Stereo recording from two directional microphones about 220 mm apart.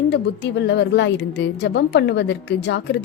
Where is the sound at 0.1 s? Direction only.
50° left (ahead or behind).